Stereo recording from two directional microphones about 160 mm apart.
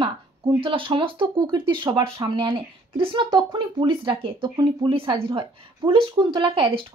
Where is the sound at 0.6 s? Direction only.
35° right (ahead or behind).